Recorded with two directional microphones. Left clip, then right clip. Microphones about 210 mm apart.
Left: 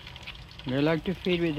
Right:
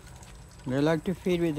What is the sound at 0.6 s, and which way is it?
Speech, 10° right (ahead or behind).